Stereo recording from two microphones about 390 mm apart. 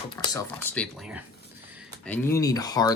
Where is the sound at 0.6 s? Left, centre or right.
Centre.